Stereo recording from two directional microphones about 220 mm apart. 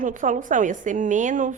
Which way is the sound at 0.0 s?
35° right (ahead or behind).